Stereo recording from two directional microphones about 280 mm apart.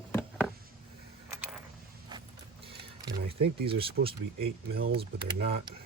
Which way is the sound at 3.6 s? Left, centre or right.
Centre.